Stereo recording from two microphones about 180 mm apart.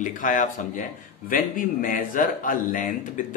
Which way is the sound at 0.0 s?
45° left (ahead or behind).